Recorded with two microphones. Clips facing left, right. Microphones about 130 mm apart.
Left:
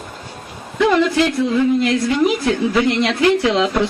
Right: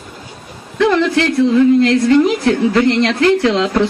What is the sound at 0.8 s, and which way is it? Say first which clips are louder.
A woman's voice: right 1 dB; 10° left (ahead or behind).